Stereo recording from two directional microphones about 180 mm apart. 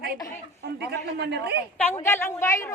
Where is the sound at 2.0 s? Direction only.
15° left (ahead or behind).